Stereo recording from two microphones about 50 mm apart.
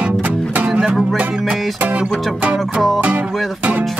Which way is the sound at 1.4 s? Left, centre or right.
Centre.